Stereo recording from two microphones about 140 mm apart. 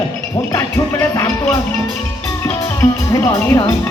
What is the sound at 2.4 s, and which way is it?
Music, 20° left (ahead or behind).